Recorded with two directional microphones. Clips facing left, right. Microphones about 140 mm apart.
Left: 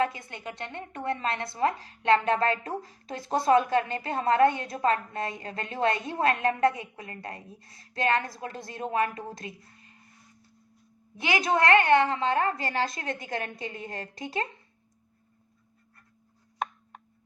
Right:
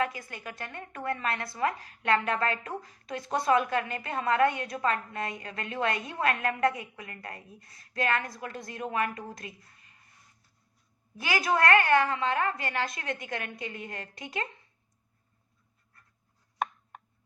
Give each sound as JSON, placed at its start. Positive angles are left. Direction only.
{"t": 0.0, "sound": "a woman's voice", "side_deg": 25}
{"t": 11.2, "sound": "a woman's voice", "side_deg": 25}